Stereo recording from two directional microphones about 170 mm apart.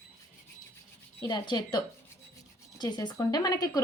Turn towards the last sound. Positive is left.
turn(degrees=20)  # may be behind; listen again after turning